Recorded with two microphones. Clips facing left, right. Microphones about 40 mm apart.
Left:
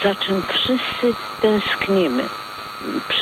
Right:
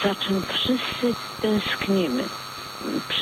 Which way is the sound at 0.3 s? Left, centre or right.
Left.